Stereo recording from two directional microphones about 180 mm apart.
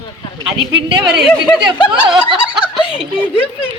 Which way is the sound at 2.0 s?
30° right (ahead or behind).